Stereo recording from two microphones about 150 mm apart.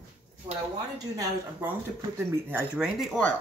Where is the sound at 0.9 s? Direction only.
25° right (ahead or behind).